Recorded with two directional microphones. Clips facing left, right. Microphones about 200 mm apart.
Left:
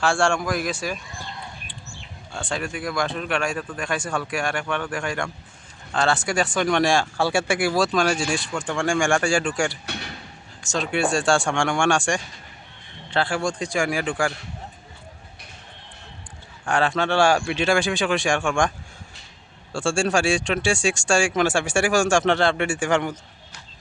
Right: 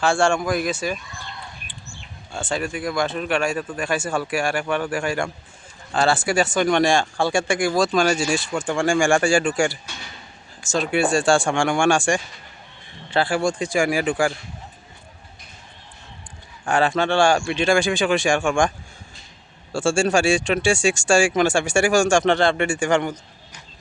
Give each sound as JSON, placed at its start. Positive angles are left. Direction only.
{"t": 0.0, "sound": "speech", "side_deg": 0}
{"t": 2.3, "sound": "a man's voice", "side_deg": -5}
{"t": 9.8, "sound": "speech", "side_deg": 65}
{"t": 10.7, "sound": "speech", "side_deg": -5}
{"t": 16.6, "sound": "speech", "side_deg": 0}
{"t": 19.7, "sound": "speech", "side_deg": -5}